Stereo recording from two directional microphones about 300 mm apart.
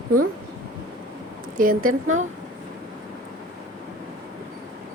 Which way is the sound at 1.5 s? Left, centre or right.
Right.